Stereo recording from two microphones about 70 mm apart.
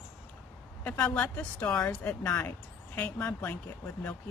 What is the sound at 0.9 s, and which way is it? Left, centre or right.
Speech, left.